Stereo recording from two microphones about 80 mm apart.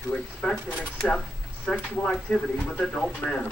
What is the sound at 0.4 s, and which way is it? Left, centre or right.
Speech, centre.